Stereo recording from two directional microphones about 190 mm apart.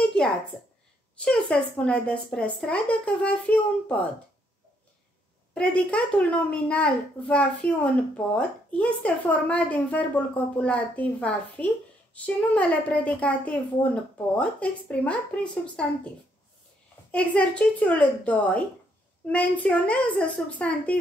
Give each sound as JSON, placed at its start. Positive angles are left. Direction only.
{"t": 0.2, "sound": "a sound", "side_deg": 5}
{"t": 1.2, "sound": "speech", "side_deg": 5}
{"t": 5.5, "sound": "a woman's voice", "side_deg": 5}
{"t": 17.1, "sound": "a woman's voice", "side_deg": 5}